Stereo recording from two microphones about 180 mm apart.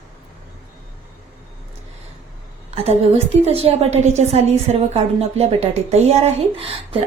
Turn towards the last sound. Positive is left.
turn(degrees=-30)  # may be behind; listen again after turning